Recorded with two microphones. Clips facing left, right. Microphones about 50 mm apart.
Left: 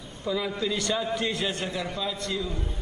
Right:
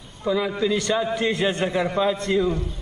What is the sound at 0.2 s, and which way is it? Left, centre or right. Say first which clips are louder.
A man's voice: right 6 dB; centre.